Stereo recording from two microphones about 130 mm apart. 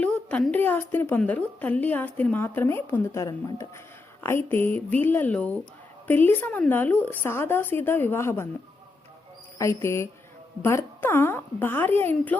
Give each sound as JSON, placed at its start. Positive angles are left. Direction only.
{"t": 0.0, "sound": "a woman's voice", "side_deg": 10}
{"t": 9.6, "sound": "a woman's voice", "side_deg": 20}